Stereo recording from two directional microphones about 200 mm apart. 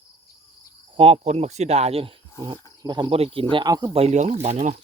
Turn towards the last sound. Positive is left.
turn(degrees=-35)  # may be behind; listen again after turning